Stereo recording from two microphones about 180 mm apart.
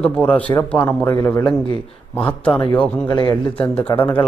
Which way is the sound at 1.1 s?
15° left (ahead or behind).